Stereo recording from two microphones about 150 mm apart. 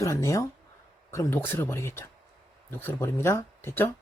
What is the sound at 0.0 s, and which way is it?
Speech, 20° left (ahead or behind).